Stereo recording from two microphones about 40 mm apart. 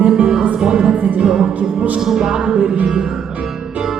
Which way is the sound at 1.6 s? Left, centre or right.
Right.